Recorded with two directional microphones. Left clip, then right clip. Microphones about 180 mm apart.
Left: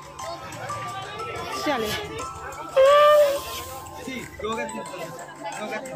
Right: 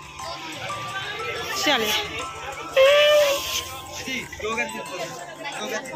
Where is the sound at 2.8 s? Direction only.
75° left (ahead or behind).